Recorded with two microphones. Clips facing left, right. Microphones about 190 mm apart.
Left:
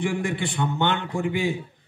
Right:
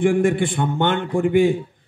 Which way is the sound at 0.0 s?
50° right (ahead or behind).